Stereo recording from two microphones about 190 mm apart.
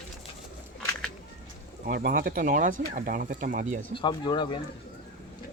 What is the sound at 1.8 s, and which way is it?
Speech, 50° right (ahead or behind).